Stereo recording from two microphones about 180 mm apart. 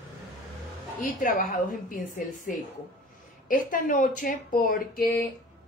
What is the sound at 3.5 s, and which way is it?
A woman's voice, 50° left (ahead or behind).